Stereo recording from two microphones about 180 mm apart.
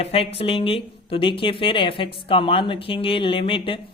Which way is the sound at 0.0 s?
35° left (ahead or behind).